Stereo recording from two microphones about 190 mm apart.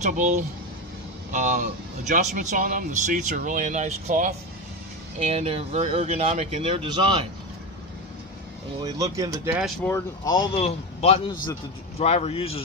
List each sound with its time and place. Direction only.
0.0 s speech: 40° right (ahead or behind)
8.8 s speech: 20° right (ahead or behind)
9.8 s speech: 15° left (ahead or behind)
10.5 s a man's voice: 30° left (ahead or behind)